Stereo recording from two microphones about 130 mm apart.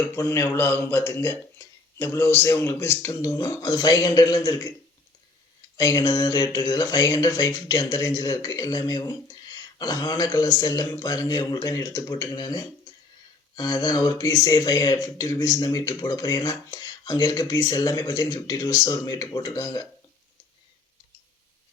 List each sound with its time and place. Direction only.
0.2 s speech: 20° left (ahead or behind)
5.7 s speech: 25° left (ahead or behind)